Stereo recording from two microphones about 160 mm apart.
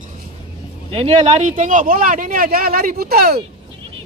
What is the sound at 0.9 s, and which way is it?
Speech, 40° right (ahead or behind).